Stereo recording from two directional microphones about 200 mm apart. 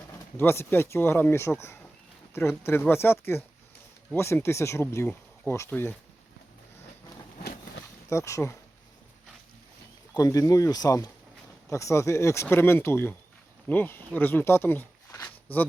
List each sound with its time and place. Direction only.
0.3 s speech: 10° left (ahead or behind)
8.1 s speech: 15° left (ahead or behind)
10.2 s speech: 20° left (ahead or behind)